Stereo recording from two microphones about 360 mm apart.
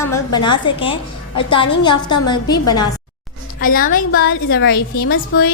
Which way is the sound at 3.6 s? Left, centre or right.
Left.